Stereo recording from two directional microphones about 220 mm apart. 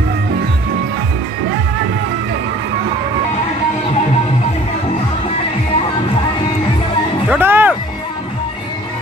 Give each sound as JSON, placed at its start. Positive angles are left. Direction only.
{"t": 7.2, "sound": "music", "side_deg": -10}